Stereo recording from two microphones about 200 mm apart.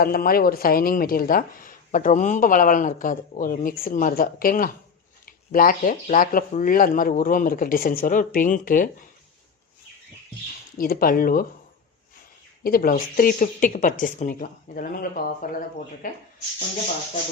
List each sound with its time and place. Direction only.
0.0 s speech: 45° left (ahead or behind)
10.8 s speech: 45° left (ahead or behind)
12.6 s speech: 45° left (ahead or behind)